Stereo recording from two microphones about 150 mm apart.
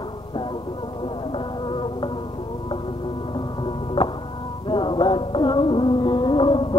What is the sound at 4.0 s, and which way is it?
Music, 40° left (ahead or behind).